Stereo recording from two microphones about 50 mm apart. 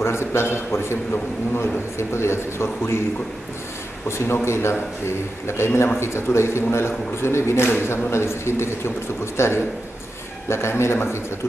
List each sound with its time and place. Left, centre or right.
0.0 s a man's voice: left
4.3 s a man's voice: left